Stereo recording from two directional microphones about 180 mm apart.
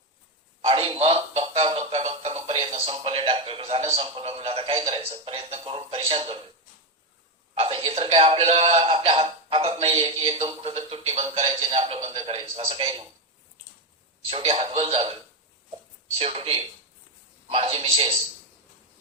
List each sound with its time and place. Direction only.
0.6 s speech: 30° right (ahead or behind)
7.6 s a man's voice: 30° right (ahead or behind)
14.3 s a man's voice: 30° right (ahead or behind)
16.1 s a man's voice: 35° right (ahead or behind)